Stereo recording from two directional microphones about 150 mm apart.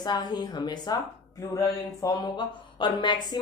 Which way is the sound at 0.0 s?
30° left (ahead or behind).